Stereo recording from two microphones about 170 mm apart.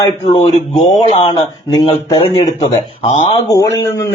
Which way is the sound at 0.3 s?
45° left (ahead or behind).